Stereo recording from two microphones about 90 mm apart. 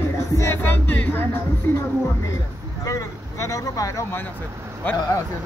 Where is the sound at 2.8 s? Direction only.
35° left (ahead or behind).